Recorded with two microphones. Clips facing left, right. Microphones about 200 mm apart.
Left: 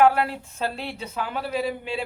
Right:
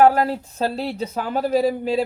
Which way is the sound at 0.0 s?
40° right (ahead or behind).